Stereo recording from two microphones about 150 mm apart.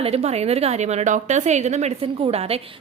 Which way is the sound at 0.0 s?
45° right (ahead or behind).